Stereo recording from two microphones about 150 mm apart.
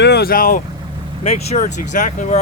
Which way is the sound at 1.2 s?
45° left (ahead or behind).